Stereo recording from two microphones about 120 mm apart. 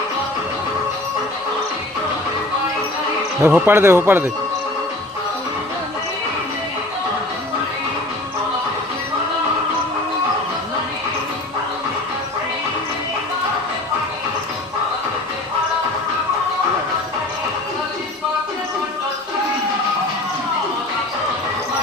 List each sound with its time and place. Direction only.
3.4 s speech: 20° right (ahead or behind)